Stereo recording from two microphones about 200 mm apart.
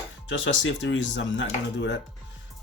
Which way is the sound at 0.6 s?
65° left (ahead or behind).